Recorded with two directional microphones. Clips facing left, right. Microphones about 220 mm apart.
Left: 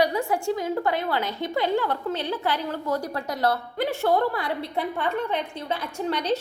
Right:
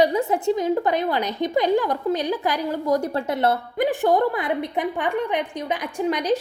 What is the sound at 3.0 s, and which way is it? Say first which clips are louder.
A woman's voice: right 4 dB; 25° right (ahead or behind).